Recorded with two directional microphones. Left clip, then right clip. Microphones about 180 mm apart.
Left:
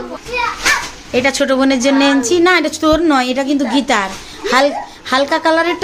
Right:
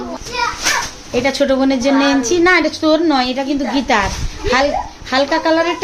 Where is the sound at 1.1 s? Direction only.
10° left (ahead or behind).